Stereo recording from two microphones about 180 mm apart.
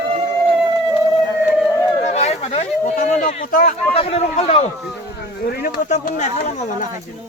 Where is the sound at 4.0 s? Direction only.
35° left (ahead or behind).